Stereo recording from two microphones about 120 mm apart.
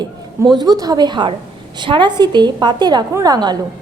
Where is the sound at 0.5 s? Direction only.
35° right (ahead or behind).